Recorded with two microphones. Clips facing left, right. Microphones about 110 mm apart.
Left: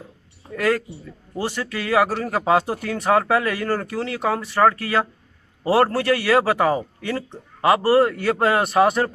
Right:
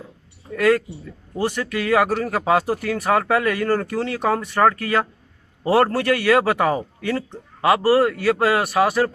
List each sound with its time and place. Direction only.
0.6 s a man's voice: 10° left (ahead or behind); by 9.1 s 25° left (ahead or behind)